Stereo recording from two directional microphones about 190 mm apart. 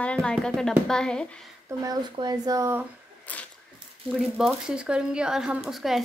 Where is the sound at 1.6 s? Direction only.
20° right (ahead or behind).